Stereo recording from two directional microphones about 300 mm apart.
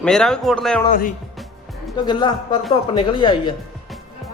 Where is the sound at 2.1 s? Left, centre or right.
Centre.